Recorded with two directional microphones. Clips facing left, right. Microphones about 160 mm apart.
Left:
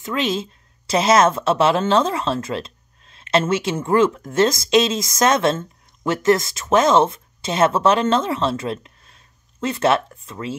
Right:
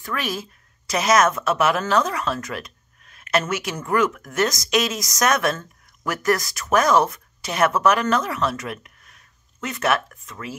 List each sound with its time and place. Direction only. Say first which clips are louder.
0.0 s a woman's voice: left 5 dB; 20° left (ahead or behind)